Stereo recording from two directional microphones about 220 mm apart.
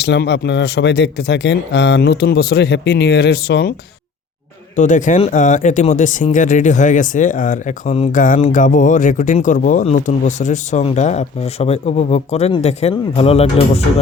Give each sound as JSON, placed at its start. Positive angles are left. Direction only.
{"t": 0.0, "sound": "speech", "side_deg": 50}
{"t": 4.8, "sound": "speech", "side_deg": 35}